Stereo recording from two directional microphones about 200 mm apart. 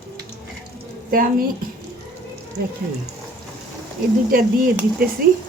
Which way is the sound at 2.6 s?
50° right (ahead or behind).